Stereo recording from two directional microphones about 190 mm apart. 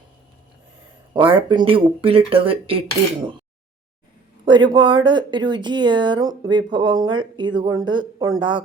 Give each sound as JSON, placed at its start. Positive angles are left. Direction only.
{"t": 1.1, "sound": "speech", "side_deg": -25}
{"t": 4.4, "sound": "speech", "side_deg": -25}